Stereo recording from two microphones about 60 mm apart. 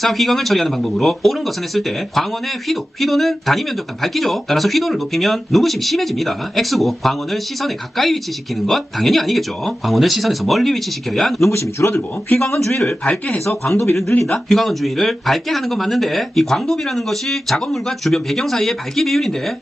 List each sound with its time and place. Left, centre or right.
0.0 s speech: centre
11.5 s speech: left
12.4 s a man's voice: centre
13.1 s speech: left
14.1 s speech: left
14.3 s speech: centre